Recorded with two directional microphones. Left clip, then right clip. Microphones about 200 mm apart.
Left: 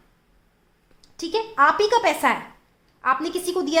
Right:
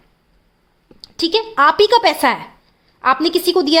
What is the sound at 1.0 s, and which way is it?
A woman's voice, 40° right (ahead or behind).